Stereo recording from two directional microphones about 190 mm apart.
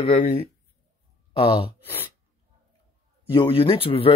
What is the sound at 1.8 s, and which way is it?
Speech, 10° left (ahead or behind).